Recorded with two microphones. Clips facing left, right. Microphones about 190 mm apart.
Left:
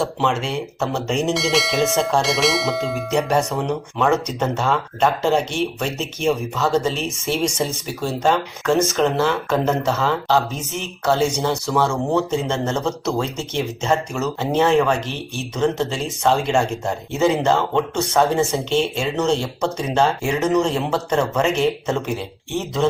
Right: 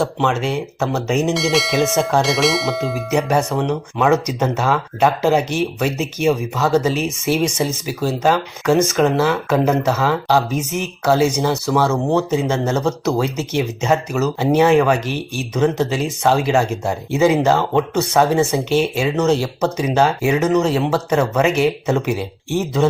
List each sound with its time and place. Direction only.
0.0 s speech: centre (ahead or behind)
14.9 s speech: 25° left (ahead or behind)
15.5 s speech: 10° right (ahead or behind)